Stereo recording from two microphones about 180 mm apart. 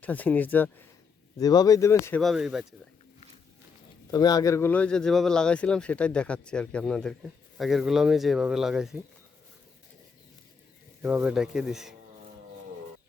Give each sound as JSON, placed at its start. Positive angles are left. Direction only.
{"t": 0.0, "sound": "speech", "side_deg": 10}
{"t": 1.4, "sound": "speech", "side_deg": 20}
{"t": 2.2, "sound": "speech", "side_deg": 0}
{"t": 4.1, "sound": "speech", "side_deg": 20}
{"t": 11.0, "sound": "speech", "side_deg": -10}